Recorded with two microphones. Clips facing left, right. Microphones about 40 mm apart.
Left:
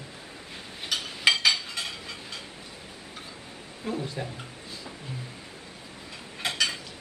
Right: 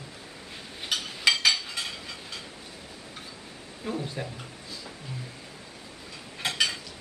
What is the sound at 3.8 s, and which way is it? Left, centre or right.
Speech, centre.